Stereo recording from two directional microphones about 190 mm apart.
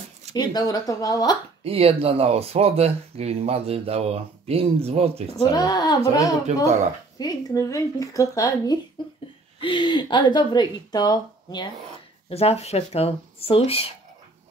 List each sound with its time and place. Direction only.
0.4 s a woman's voice: 20° left (ahead or behind)
1.6 s speech: 30° right (ahead or behind)
5.5 s a woman's voice: 20° left (ahead or behind)
12.3 s speech: 35° left (ahead or behind)